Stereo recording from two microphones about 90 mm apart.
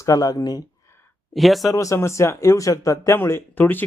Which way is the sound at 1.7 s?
40° left (ahead or behind).